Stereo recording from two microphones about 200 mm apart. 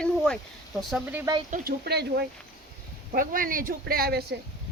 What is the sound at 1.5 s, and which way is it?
Speech, 50° right (ahead or behind).